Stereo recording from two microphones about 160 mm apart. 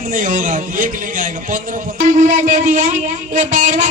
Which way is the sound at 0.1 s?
55° right (ahead or behind).